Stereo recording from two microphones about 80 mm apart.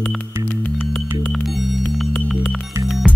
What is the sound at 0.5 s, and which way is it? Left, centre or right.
Music, centre.